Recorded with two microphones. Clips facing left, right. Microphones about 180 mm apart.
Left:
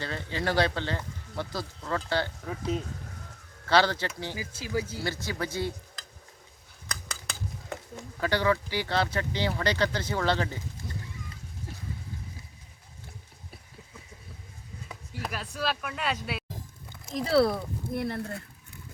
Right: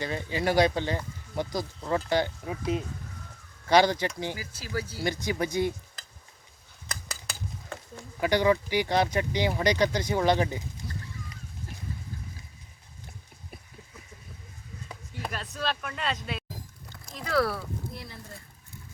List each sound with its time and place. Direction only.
0.0 s speech: 15° right (ahead or behind)
4.4 s speech: 20° left (ahead or behind)
5.0 s speech: 20° right (ahead or behind)
6.8 s scissors: 5° right (ahead or behind)
8.2 s speech: 15° right (ahead or behind)
14.8 s speech: 5° left (ahead or behind)
17.2 s speech: 30° left (ahead or behind)
17.9 s speech: 60° left (ahead or behind)